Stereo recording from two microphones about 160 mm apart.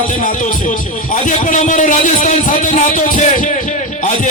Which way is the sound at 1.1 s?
50° left (ahead or behind).